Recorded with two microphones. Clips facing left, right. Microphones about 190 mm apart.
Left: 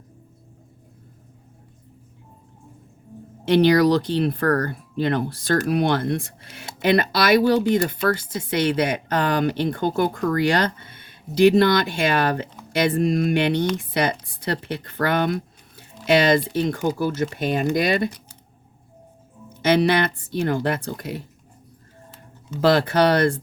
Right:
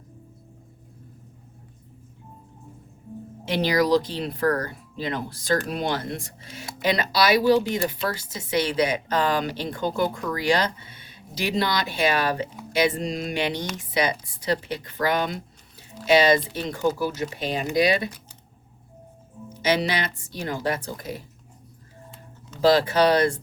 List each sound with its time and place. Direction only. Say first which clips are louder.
3.5 s speech: left 5 dB; 60° left (ahead or behind)
17.0 s speech: left 4 dB; 50° left (ahead or behind)
19.6 s speech: left 6 dB; 55° left (ahead or behind)
22.6 s speech: left 1 dB; 60° left (ahead or behind)